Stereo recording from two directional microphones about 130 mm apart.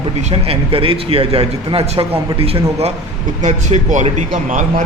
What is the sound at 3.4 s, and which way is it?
Speech, 65° right (ahead or behind).